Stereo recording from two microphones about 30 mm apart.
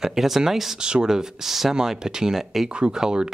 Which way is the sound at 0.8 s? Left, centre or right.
Right.